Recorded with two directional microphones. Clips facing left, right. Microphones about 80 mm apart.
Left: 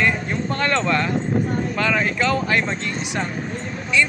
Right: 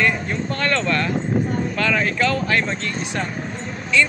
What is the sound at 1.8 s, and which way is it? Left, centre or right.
Speech, centre.